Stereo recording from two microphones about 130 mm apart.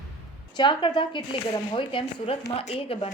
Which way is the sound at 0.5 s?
35° left (ahead or behind).